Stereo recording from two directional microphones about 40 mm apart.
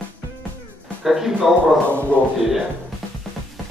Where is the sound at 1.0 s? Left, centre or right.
Centre.